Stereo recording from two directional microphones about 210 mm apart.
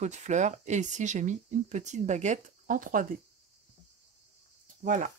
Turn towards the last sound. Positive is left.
turn(degrees=-35)  # may be behind; listen again after turning